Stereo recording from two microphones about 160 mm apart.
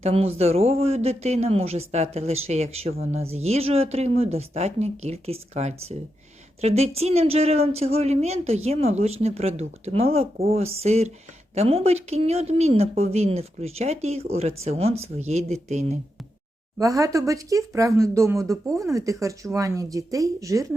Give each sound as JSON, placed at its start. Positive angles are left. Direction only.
{"t": 0.0, "sound": "speech", "side_deg": -40}
{"t": 16.8, "sound": "speech", "side_deg": -20}